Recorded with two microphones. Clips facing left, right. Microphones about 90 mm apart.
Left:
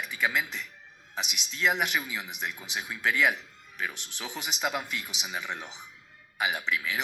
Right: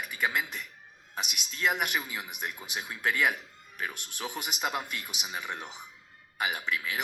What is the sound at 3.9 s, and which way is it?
Speech, 10° right (ahead or behind).